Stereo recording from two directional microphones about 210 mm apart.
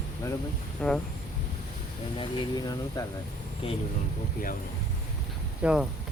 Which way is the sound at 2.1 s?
20° left (ahead or behind).